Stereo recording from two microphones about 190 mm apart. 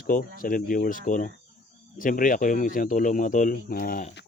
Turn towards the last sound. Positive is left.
turn(degrees=50)  # may be behind; listen again after turning